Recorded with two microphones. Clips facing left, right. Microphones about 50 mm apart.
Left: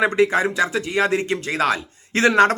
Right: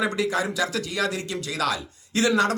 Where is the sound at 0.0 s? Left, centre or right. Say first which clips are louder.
Left 7 dB; left.